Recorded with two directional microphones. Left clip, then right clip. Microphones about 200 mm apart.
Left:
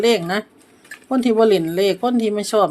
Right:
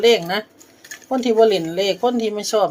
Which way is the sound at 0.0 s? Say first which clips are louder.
Right 2 dB; 15° left (ahead or behind).